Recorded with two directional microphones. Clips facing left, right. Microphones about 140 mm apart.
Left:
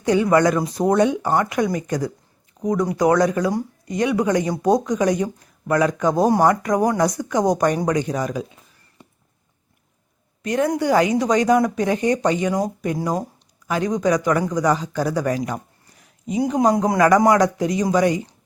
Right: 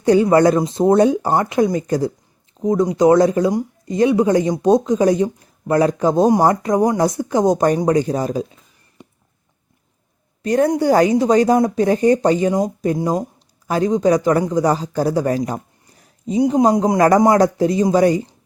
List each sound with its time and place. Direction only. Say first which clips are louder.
0.0 s speech: right 4 dB; 35° right (ahead or behind)
9.0 s a sound: right 5 dB; 20° right (ahead or behind)
10.4 s a woman's voice: right 4 dB; 35° right (ahead or behind)
13.7 s speech: right 4 dB; 35° right (ahead or behind)